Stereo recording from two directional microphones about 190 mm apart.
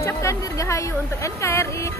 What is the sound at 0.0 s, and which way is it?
Speech, 15° left (ahead or behind).